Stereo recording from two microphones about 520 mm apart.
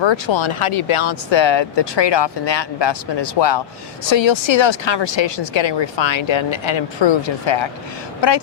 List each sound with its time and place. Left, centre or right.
0.0 s speech: left